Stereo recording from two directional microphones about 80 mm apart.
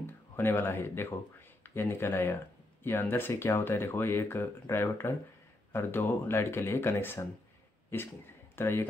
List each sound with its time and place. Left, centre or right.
0.0 s speech: left